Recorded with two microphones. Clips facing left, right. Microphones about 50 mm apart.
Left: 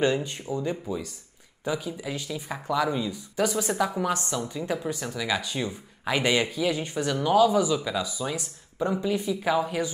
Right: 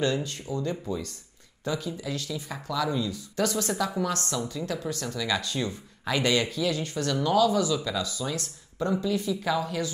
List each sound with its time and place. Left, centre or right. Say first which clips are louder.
0.0 s speech: left 3 dB; left